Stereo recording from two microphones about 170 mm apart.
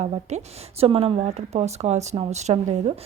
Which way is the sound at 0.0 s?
40° right (ahead or behind).